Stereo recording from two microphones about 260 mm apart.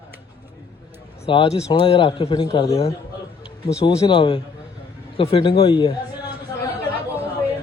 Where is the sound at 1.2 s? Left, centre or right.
Left.